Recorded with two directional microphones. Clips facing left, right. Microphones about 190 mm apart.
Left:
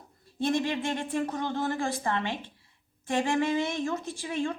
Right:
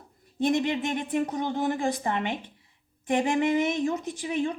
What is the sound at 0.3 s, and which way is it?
A woman's voice, 15° right (ahead or behind).